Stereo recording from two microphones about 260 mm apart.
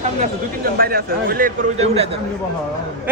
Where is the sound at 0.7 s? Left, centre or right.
Right.